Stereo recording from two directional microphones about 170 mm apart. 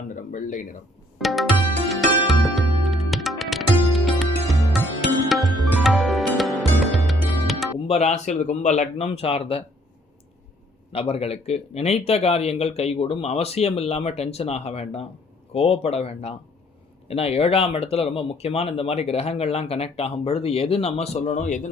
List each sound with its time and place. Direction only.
0.3 s speech: 50° left (ahead or behind)
1.2 s music: centre (ahead or behind)
7.9 s speech: 40° left (ahead or behind)
10.9 s speech: 35° left (ahead or behind)